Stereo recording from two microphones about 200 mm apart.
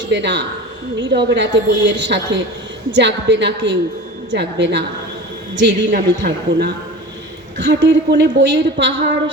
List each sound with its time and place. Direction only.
0.1 s a woman's voice: 60° right (ahead or behind)